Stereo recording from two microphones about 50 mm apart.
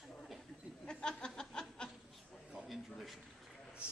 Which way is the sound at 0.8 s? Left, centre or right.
Centre.